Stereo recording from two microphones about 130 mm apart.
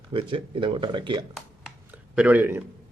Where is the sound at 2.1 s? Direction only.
10° right (ahead or behind).